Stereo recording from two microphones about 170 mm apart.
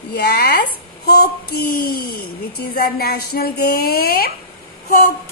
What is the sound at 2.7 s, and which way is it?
A woman's voice, 65° left (ahead or behind).